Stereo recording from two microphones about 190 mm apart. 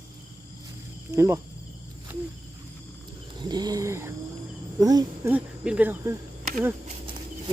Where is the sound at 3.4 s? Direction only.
20° right (ahead or behind).